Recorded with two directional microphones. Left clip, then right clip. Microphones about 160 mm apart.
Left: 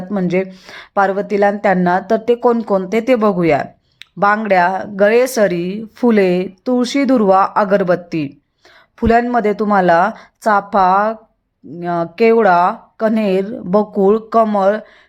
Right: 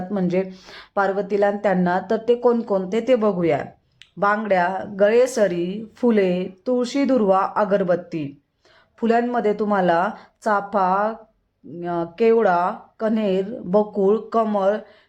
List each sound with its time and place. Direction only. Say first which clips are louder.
0.1 s speech: left 5 dB; 25° left (ahead or behind)
0.4 s speech: left 5 dB; 10° left (ahead or behind)
0.8 s speech: left 6 dB; 25° left (ahead or behind)